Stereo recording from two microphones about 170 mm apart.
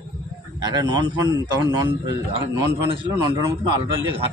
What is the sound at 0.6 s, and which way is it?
A man's voice, 25° right (ahead or behind).